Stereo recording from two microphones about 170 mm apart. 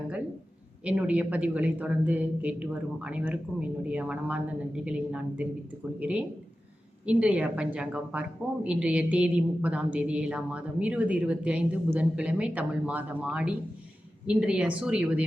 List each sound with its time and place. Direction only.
0.9 s a woman's voice: 10° right (ahead or behind)